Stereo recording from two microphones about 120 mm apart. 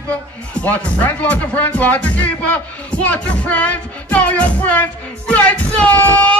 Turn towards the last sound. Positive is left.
turn(degrees=10)  # may be behind; listen again after turning